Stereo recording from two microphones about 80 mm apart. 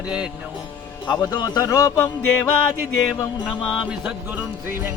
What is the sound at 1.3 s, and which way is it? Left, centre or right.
Speech, left.